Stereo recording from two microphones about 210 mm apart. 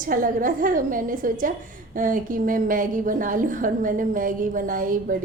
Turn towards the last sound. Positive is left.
turn(degrees=-40)  # may be behind; listen again after turning